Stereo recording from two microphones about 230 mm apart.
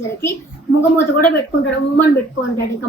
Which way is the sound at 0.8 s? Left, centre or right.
Centre.